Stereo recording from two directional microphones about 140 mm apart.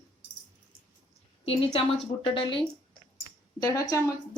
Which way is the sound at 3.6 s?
25° left (ahead or behind).